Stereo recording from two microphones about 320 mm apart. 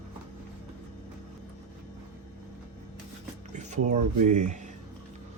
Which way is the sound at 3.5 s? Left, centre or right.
Right.